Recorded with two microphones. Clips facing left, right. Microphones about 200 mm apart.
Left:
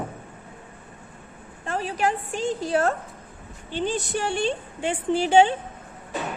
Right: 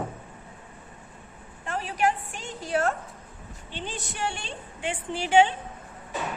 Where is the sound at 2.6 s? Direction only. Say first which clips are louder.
Even; 35° left (ahead or behind).